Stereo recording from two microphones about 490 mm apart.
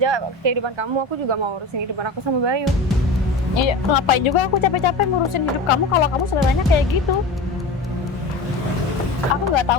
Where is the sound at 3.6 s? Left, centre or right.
Left.